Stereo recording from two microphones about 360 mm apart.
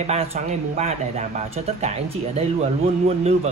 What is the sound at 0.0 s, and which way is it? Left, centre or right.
Speech, centre.